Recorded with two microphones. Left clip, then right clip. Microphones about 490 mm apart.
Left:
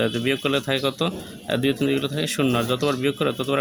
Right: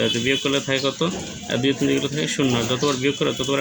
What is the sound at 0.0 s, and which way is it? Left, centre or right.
Speech, left.